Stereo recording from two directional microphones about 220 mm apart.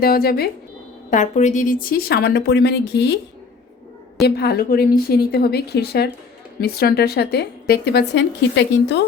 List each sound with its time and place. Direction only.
0.0 s speech: 45° left (ahead or behind)
1.1 s speech: 35° left (ahead or behind); by 3.1 s 50° left (ahead or behind)
4.4 s speech: 45° left (ahead or behind)